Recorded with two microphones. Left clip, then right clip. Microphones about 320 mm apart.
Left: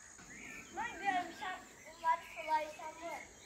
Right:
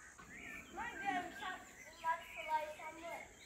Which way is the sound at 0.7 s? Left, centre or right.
Left.